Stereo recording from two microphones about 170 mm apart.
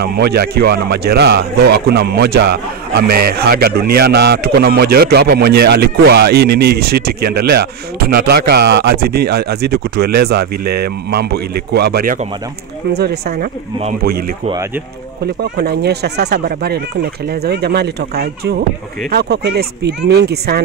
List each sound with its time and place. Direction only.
0.0 s speech: 70° right (ahead or behind)
15.5 s speech: 75° right (ahead or behind)